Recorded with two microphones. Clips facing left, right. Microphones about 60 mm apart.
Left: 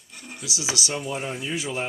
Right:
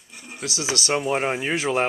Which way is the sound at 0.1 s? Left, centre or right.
Centre.